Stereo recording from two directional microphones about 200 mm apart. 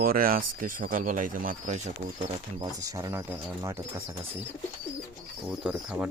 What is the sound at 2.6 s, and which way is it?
Speech, 20° right (ahead or behind).